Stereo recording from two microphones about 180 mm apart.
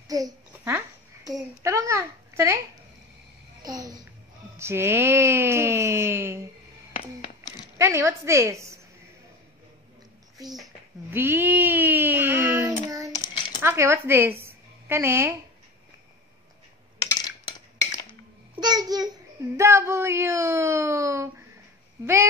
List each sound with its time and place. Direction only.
0.1 s a child's voice: 15° right (ahead or behind)
3.6 s a child's voice: 20° right (ahead or behind)
7.7 s speech: 15° right (ahead or behind)
11.1 s a sound: 10° right (ahead or behind)
13.1 s a sound: 25° left (ahead or behind)
13.6 s a woman's voice: 15° right (ahead or behind)
17.1 s cutlery: 20° left (ahead or behind)
18.6 s babbling: 20° right (ahead or behind)
19.5 s speech: 15° right (ahead or behind)